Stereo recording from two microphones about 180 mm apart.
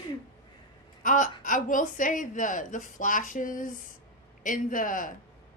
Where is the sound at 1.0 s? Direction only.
45° left (ahead or behind).